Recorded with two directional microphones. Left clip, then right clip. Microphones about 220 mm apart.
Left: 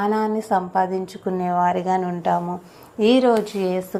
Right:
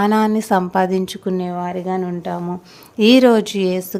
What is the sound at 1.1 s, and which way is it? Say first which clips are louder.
Speech: even; 30° right (ahead or behind).